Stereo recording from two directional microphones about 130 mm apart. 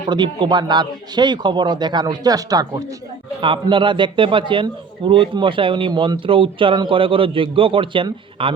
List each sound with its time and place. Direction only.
0.1 s a man's voice: 35° right (ahead or behind)
3.4 s a man's voice: 40° right (ahead or behind)